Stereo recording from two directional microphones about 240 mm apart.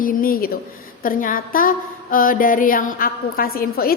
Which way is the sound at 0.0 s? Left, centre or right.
Left.